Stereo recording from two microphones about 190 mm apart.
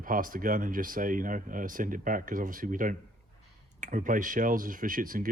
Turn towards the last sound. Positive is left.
turn(degrees=-45)  # may be behind; listen again after turning